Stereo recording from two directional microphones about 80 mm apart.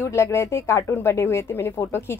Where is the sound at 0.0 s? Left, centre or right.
Left.